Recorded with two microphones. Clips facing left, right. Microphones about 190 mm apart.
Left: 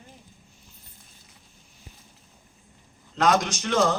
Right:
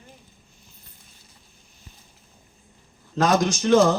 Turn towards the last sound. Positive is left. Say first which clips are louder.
# right 6 dB
turn(degrees=-30)  # may be behind; listen again after turning